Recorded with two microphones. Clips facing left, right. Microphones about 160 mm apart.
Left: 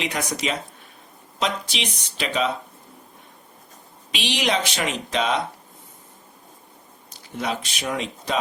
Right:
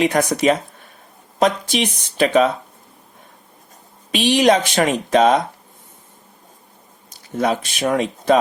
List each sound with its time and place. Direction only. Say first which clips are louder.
0.0 s speech: right 10 dB; 50° right (ahead or behind)
4.1 s speech: right 10 dB; 50° right (ahead or behind)
7.3 s speech: right 8 dB; 50° right (ahead or behind)